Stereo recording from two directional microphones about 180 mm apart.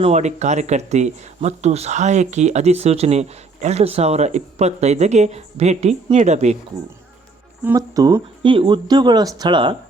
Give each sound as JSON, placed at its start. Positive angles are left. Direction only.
{"t": 0.0, "sound": "speech", "side_deg": -40}
{"t": 7.6, "sound": "speech", "side_deg": -15}